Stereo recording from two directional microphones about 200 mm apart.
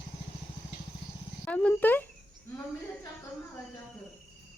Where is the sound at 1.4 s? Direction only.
5° left (ahead or behind).